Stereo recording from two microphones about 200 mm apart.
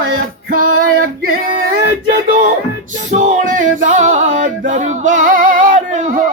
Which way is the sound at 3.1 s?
40° right (ahead or behind).